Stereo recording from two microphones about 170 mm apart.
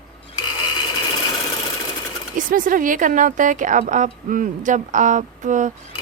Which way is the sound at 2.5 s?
50° right (ahead or behind).